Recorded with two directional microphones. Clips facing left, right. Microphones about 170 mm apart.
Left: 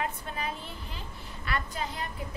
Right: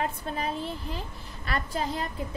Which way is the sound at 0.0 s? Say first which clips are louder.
Right 3 dB; 35° right (ahead or behind).